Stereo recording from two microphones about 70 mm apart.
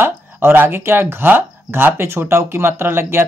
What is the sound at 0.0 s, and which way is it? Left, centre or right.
Speech, right.